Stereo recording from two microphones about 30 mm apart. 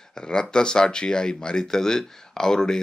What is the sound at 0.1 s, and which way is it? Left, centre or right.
Speech, left.